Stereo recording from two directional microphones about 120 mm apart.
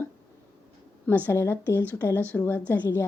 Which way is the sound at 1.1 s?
20° left (ahead or behind).